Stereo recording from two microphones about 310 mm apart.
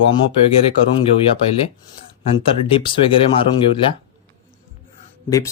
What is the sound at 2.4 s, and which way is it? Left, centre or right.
Speech, centre.